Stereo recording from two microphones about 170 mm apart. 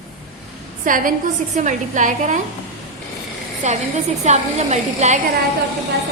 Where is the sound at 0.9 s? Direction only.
55° right (ahead or behind).